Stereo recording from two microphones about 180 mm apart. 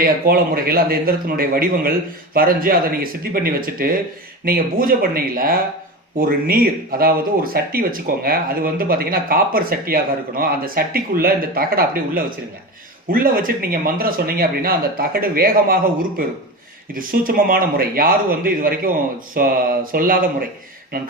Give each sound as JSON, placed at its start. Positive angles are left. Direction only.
{"t": 0.0, "sound": "speech", "side_deg": -55}